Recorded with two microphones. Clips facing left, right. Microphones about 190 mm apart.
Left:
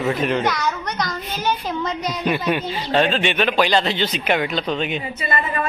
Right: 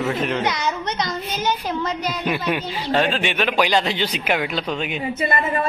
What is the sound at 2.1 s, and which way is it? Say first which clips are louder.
Speech: left 3 dB; 5° right (ahead or behind).